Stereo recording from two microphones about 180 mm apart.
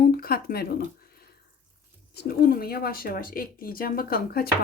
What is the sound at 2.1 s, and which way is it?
A woman's voice, 60° left (ahead or behind).